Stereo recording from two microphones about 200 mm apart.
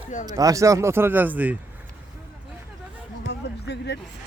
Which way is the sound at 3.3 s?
60° left (ahead or behind).